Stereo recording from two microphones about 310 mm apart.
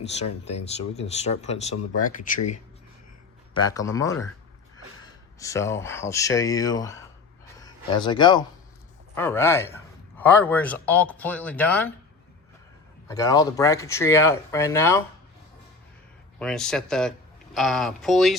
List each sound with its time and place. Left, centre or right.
0.0 s speech: centre
3.5 s speech: centre
13.1 s speech: centre
16.4 s speech: centre